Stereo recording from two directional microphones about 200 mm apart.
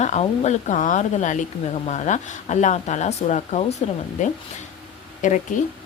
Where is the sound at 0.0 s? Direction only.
35° left (ahead or behind).